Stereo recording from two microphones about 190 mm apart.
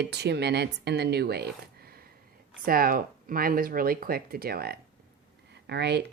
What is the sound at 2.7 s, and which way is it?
Speech, 50° right (ahead or behind).